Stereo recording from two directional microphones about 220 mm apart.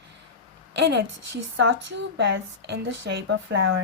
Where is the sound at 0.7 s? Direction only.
50° right (ahead or behind).